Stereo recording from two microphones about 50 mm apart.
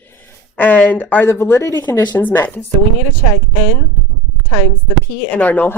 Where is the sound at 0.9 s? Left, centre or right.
Left.